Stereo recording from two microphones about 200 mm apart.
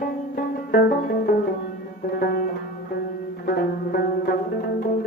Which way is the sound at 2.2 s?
45° left (ahead or behind).